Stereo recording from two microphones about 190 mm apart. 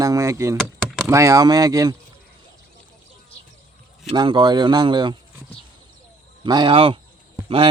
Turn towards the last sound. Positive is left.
turn(degrees=-30)  # may be behind; listen again after turning